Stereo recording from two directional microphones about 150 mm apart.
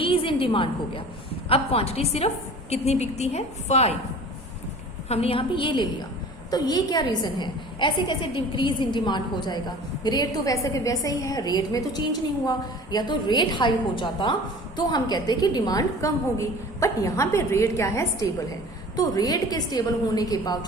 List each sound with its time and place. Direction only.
0.0 s a woman's voice: 35° left (ahead or behind)
5.0 s a woman's voice: 40° left (ahead or behind); by 20.7 s 25° left (ahead or behind)